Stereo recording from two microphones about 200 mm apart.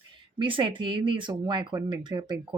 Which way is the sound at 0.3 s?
25° right (ahead or behind).